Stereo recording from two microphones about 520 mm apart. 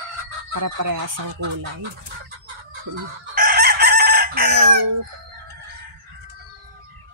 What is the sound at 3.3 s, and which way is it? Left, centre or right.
Chicken, centre.